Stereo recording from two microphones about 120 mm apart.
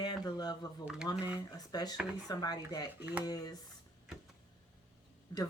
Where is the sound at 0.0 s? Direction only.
35° left (ahead or behind).